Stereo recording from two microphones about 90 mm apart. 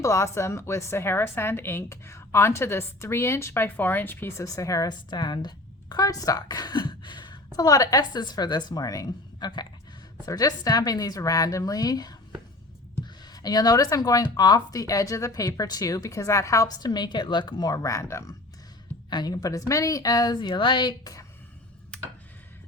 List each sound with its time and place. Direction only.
0.0 s a woman's voice: 35° left (ahead or behind)
9.4 s speech: 55° left (ahead or behind)
13.3 s speech: 45° left (ahead or behind)
17.7 s a woman's voice: 40° left (ahead or behind)
19.1 s speech: 50° left (ahead or behind)